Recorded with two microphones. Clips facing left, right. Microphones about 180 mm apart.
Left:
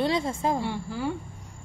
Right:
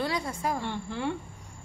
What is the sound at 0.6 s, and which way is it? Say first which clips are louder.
Speech: left 3 dB; 5° left (ahead or behind).